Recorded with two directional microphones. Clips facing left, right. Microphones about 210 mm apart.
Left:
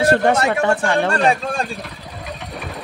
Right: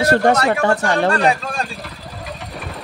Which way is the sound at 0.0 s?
40° right (ahead or behind).